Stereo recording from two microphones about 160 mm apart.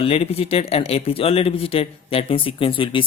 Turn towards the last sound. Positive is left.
turn(degrees=30)  # may be behind; listen again after turning